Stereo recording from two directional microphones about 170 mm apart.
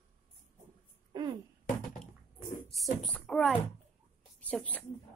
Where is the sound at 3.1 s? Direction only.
5° left (ahead or behind).